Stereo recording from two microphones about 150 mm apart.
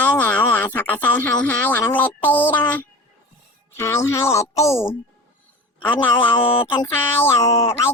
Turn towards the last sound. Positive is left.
turn(degrees=20)  # may be behind; listen again after turning